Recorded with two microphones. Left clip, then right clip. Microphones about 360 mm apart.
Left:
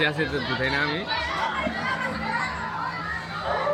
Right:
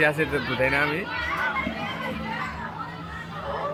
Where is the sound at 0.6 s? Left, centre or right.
Centre.